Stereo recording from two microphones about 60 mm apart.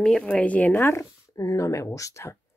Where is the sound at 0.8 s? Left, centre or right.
Left.